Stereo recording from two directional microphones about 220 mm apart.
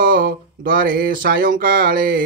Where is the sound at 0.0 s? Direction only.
40° right (ahead or behind).